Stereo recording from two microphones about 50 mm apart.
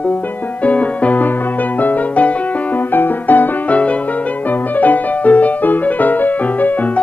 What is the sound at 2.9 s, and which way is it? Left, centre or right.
Music, left.